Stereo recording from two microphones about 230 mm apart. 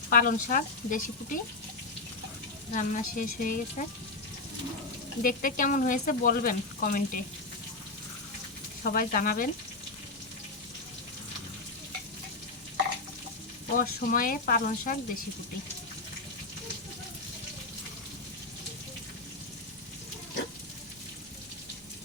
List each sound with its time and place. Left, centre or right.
0.1 s speech: left
2.7 s speech: left
5.2 s speech: left
8.8 s speech: left
13.7 s speech: left